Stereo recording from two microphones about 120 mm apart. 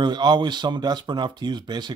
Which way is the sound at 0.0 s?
35° right (ahead or behind).